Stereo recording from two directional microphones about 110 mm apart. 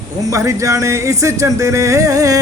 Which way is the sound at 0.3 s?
30° right (ahead or behind).